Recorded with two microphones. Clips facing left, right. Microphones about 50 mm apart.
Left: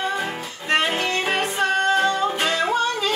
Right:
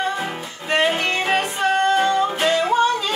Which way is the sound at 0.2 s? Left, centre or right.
Centre.